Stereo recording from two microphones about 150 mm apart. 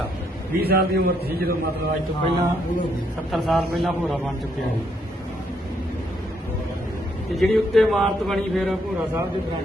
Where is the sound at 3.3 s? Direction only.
Centre (ahead or behind).